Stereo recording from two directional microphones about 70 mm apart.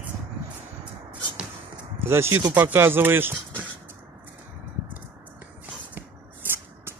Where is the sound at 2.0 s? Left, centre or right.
Right.